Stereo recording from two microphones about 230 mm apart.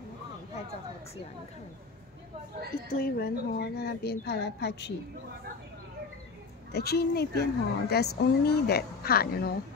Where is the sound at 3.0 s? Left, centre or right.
Left.